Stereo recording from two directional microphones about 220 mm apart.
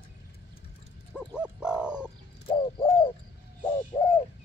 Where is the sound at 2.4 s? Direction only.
25° left (ahead or behind).